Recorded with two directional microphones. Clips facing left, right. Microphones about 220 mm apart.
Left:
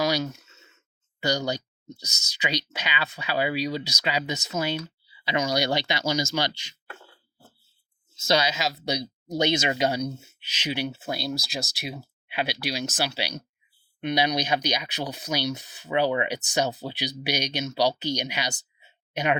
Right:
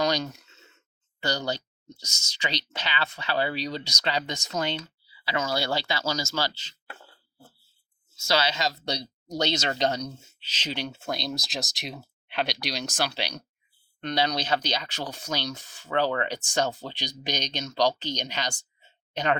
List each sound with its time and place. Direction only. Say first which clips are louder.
0.0 s speech: left 1 dB; 5° left (ahead or behind)
5.0 s speech: left 3 dB; 20° left (ahead or behind)
8.3 s speech: left 2 dB; 15° left (ahead or behind)